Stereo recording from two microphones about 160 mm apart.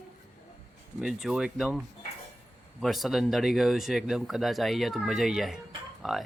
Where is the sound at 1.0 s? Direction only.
Centre (ahead or behind).